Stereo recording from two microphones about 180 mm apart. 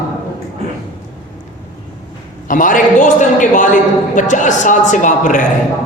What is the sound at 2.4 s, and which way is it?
A woman's voice, 45° left (ahead or behind).